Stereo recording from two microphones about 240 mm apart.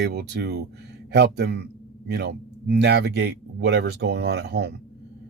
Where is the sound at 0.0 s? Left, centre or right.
Right.